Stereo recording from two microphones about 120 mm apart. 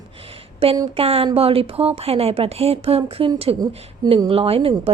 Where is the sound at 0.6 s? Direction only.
55° right (ahead or behind).